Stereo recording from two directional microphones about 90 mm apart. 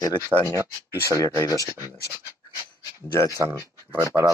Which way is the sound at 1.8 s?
25° right (ahead or behind).